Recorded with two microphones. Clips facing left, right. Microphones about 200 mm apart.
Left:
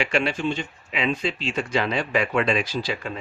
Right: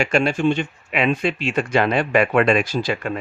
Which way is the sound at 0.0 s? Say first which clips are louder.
Right 5 dB; 45° right (ahead or behind).